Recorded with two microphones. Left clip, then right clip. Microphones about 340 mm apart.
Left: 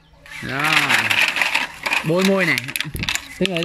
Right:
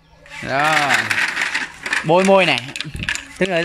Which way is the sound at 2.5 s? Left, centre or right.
Centre.